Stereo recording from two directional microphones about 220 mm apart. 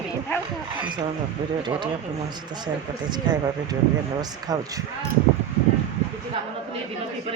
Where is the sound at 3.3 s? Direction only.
20° right (ahead or behind).